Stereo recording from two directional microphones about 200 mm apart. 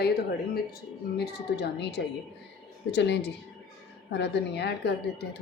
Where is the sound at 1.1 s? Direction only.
60° left (ahead or behind).